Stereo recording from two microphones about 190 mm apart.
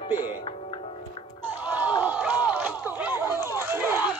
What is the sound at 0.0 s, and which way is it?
Music, 30° left (ahead or behind).